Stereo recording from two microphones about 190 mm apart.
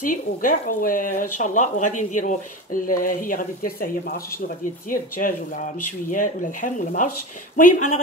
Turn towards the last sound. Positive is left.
turn(degrees=40)  # may be behind; listen again after turning